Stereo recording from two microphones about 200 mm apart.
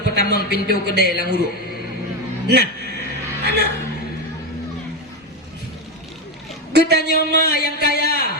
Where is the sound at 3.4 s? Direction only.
55° right (ahead or behind).